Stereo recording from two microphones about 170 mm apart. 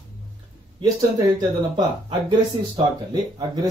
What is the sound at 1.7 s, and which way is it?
Speech, 30° right (ahead or behind).